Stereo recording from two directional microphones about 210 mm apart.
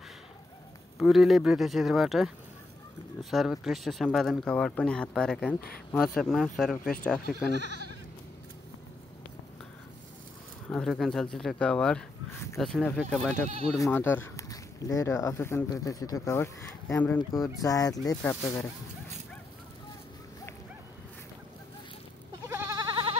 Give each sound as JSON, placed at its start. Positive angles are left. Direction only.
{"t": 0.9, "sound": "speech", "side_deg": 0}
{"t": 10.7, "sound": "speech", "side_deg": 0}
{"t": 22.5, "sound": "goat", "side_deg": -10}